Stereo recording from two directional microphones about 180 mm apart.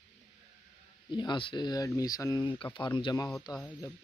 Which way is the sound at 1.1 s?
25° left (ahead or behind).